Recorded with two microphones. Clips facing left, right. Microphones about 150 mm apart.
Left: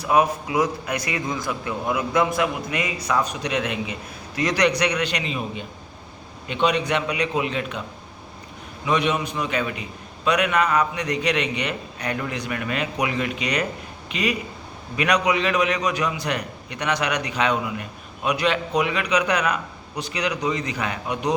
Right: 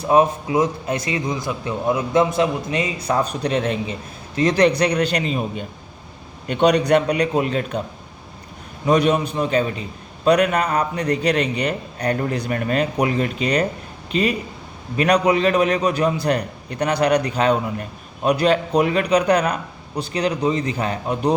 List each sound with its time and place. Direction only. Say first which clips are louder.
0.0 s a man's voice: right 4 dB; 30° right (ahead or behind)
8.8 s a man's voice: right 5 dB; 40° right (ahead or behind)